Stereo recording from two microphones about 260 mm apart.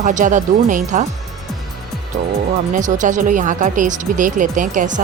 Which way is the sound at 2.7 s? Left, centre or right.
Right.